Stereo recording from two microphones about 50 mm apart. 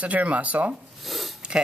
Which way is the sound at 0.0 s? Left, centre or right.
Right.